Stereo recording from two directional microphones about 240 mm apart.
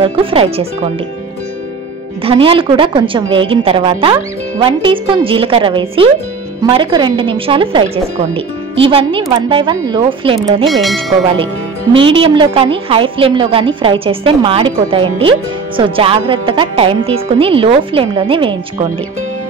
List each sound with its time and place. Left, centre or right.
0.0 s a woman's voice: right
2.2 s a woman's voice: right
10.7 s speech: centre
11.9 s a woman's voice: right